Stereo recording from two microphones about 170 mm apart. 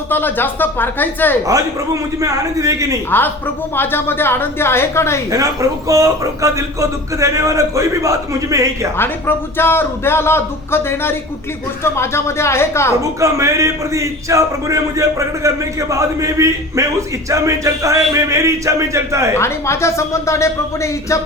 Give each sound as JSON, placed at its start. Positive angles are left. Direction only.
{"t": 0.1, "sound": "a man's voice", "side_deg": 10}
{"t": 2.2, "sound": "a man's voice", "side_deg": -20}
{"t": 3.1, "sound": "a man's voice", "side_deg": 10}
{"t": 5.3, "sound": "a man's voice", "side_deg": -20}
{"t": 9.0, "sound": "a man's voice", "side_deg": 15}
{"t": 13.0, "sound": "speech", "side_deg": -20}
{"t": 19.4, "sound": "a man's voice", "side_deg": 15}